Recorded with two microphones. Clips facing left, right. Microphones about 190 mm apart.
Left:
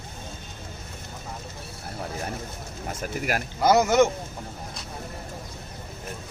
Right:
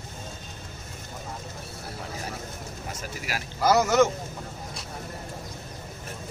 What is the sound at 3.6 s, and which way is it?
Speech, 20° left (ahead or behind).